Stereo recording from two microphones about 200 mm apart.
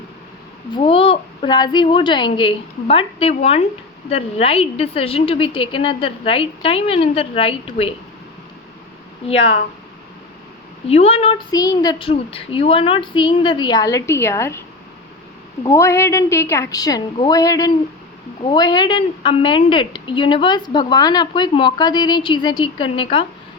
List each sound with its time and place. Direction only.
0.7 s a woman's voice: 25° left (ahead or behind)
9.2 s a woman's voice: 30° left (ahead or behind)
10.8 s a woman's voice: 30° left (ahead or behind)
11.5 s a woman's voice: 20° left (ahead or behind)
15.6 s a woman's voice: 15° left (ahead or behind)